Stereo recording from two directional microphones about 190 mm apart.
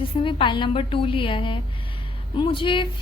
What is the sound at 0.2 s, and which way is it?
Speech, 25° left (ahead or behind).